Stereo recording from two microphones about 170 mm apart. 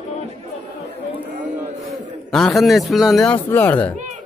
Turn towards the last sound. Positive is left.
turn(degrees=10)  # may be behind; listen again after turning